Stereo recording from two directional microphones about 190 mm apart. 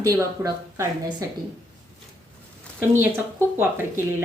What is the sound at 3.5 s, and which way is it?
Speech, 10° right (ahead or behind).